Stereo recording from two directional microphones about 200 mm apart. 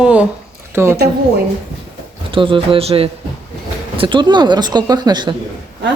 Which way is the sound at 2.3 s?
25° right (ahead or behind).